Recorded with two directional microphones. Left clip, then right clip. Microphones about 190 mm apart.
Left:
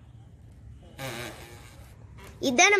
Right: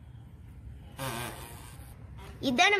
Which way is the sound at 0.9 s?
35° right (ahead or behind).